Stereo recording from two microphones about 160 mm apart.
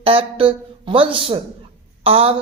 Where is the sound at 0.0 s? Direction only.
35° right (ahead or behind).